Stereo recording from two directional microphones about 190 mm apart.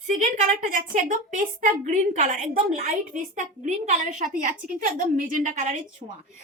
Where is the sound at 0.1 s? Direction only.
40° right (ahead or behind).